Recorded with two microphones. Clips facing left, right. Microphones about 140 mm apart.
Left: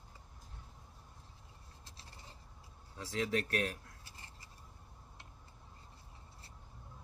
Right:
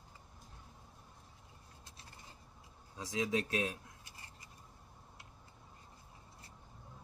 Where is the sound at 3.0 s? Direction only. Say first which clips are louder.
Even; 15° right (ahead or behind).